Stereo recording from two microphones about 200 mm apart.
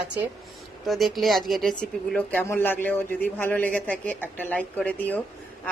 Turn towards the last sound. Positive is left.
turn(degrees=10)  # may be behind; listen again after turning